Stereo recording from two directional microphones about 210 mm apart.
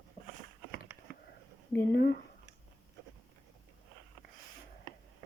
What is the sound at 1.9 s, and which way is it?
Speech, 50° left (ahead or behind).